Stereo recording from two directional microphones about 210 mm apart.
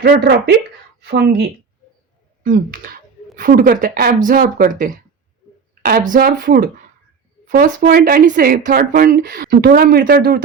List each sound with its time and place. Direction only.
0.0 s speech: 50° right (ahead or behind)